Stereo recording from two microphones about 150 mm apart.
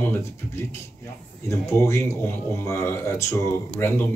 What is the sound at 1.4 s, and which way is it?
Speech, 20° left (ahead or behind).